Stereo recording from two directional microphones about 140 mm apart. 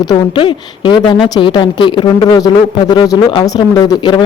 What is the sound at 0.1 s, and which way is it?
Speech, 35° left (ahead or behind).